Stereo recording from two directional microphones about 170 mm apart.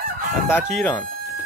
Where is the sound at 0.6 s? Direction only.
Centre (ahead or behind).